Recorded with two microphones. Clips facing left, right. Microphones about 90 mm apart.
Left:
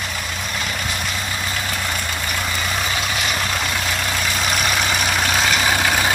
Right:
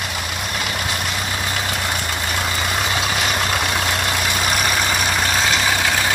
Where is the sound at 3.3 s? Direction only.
15° right (ahead or behind); by 6.1 s 10° left (ahead or behind).